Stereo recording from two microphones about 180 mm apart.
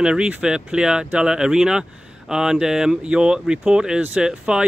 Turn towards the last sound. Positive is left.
turn(degrees=-5)  # may be behind; listen again after turning